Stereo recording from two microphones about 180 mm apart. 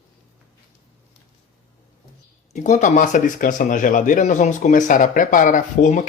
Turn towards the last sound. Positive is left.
turn(degrees=45)  # may be behind; listen again after turning